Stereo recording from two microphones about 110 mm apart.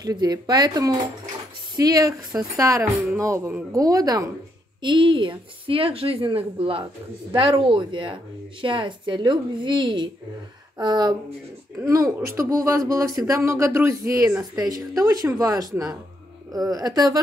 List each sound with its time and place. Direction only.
0.0 s speech: 35° right (ahead or behind)
4.8 s a woman's voice: 45° right (ahead or behind)